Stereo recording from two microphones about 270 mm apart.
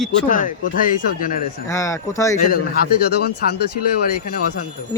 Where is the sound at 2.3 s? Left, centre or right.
Left.